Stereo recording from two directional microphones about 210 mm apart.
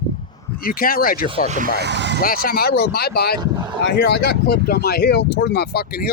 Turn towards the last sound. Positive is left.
turn(degrees=50)  # may be behind; listen again after turning